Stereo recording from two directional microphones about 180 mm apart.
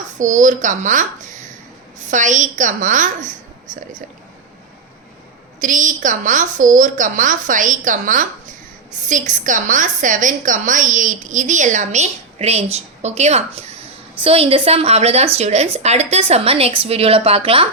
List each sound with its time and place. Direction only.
0.2 s a woman's voice: 45° right (ahead or behind)
5.5 s a woman's voice: 45° right (ahead or behind)